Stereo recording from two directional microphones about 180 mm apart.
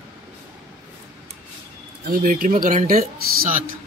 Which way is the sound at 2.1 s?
50° right (ahead or behind).